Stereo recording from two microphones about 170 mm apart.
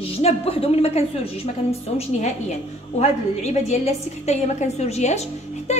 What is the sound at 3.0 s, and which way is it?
A woman's voice, 40° left (ahead or behind).